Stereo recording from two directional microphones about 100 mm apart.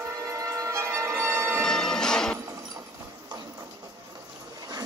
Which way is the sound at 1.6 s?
5° left (ahead or behind).